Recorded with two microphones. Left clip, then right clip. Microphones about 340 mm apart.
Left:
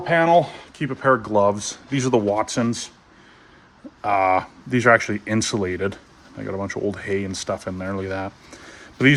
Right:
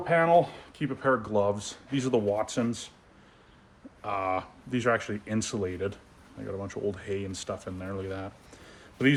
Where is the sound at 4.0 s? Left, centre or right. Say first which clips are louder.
Left 12 dB; left.